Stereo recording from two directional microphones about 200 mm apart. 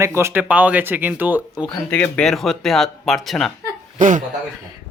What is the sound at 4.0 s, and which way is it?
Speech, 40° right (ahead or behind).